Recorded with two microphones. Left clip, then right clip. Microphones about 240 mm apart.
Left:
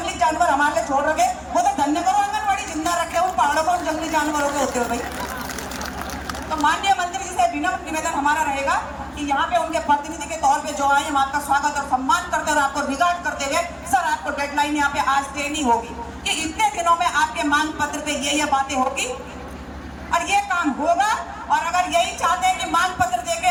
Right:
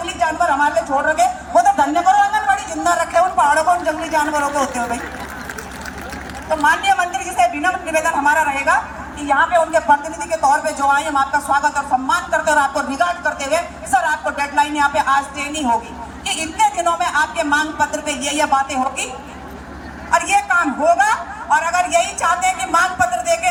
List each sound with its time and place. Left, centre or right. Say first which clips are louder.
0.2 s a sound: right 2 dB; centre
6.5 s speech: right 4 dB; centre
20.1 s a woman's voice: right 5 dB; centre